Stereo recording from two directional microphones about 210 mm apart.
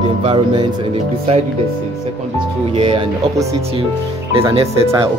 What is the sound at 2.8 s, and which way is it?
Speech, 25° right (ahead or behind).